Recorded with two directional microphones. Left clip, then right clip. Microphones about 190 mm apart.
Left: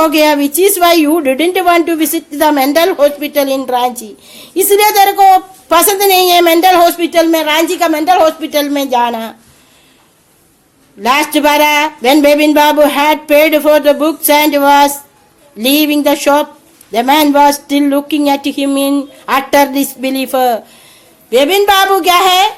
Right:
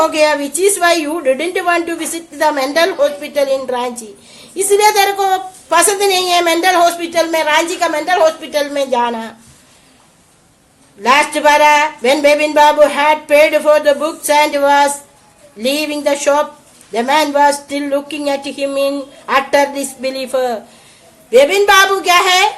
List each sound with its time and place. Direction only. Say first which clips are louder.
0.0 s a woman's voice: left 3 dB; 45° left (ahead or behind)
11.0 s a woman's voice: even; 45° left (ahead or behind)